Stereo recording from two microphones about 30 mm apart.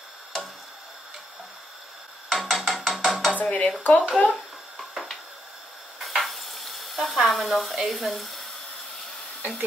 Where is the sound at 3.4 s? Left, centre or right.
Left.